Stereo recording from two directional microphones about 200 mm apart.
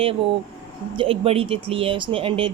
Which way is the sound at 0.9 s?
30° right (ahead or behind).